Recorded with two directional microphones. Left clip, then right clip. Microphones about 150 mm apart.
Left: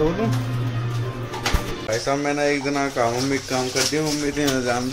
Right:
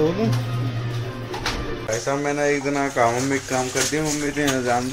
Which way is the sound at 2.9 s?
5° right (ahead or behind).